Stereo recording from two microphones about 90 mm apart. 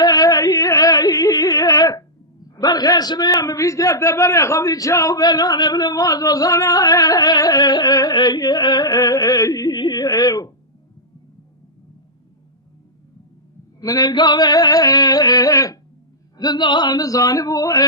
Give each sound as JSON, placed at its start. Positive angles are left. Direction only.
{"t": 0.0, "sound": "music", "side_deg": 45}
{"t": 2.6, "sound": "a man's voice", "side_deg": 45}
{"t": 13.8, "sound": "a man's voice", "side_deg": 45}
{"t": 16.4, "sound": "a man's voice", "side_deg": 55}